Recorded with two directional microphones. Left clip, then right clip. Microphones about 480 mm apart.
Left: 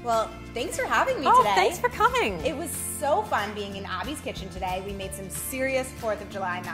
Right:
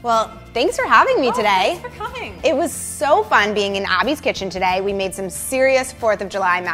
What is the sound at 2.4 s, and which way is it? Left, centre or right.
Speech, right.